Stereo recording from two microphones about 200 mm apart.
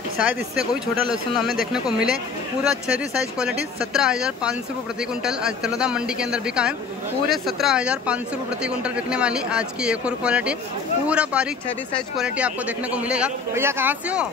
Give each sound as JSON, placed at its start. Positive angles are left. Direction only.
{"t": 1.4, "sound": "a man's voice", "side_deg": 0}